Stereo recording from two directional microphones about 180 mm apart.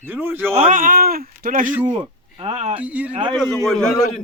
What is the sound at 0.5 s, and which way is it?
Speech, 35° right (ahead or behind).